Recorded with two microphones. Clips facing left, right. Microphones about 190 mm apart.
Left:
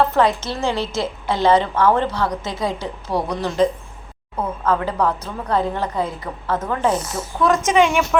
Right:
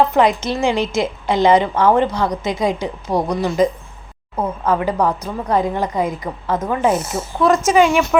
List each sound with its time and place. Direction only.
0.1 s a woman's voice: 15° right (ahead or behind)
7.0 s speech: 25° right (ahead or behind)
7.6 s speech: 5° right (ahead or behind)